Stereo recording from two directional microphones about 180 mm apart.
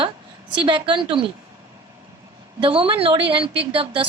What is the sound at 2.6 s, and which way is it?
A woman's voice, 30° right (ahead or behind).